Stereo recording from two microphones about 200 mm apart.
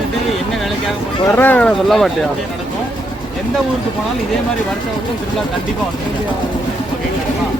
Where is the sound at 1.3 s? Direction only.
10° left (ahead or behind).